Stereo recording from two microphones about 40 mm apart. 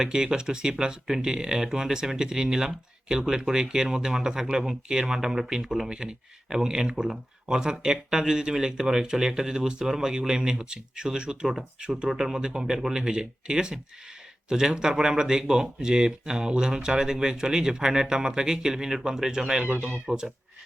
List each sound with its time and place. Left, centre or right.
0.0 s speech: centre